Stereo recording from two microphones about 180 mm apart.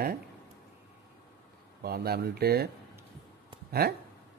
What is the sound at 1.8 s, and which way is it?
Speech, 60° right (ahead or behind).